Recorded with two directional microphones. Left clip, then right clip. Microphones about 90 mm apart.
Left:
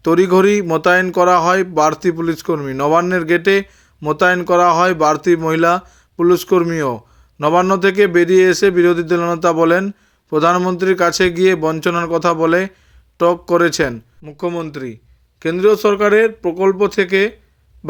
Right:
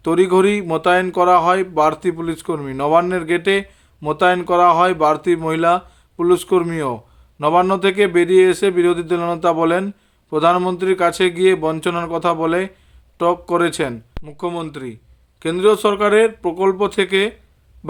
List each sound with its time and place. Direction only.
0.0 s a man's voice: 25° left (ahead or behind)